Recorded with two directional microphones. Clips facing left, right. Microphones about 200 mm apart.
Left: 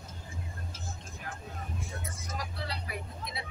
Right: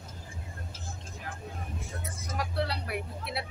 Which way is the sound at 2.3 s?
65° right (ahead or behind).